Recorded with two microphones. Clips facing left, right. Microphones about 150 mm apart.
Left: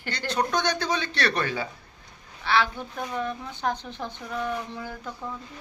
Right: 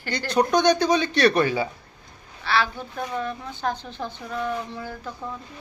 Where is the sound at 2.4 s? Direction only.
20° left (ahead or behind).